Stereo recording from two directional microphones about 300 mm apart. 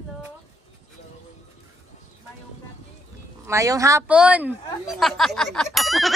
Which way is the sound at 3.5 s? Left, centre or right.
Centre.